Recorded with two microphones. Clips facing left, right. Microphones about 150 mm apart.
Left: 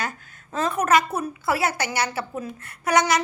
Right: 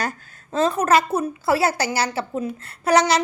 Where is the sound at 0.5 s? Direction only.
30° right (ahead or behind).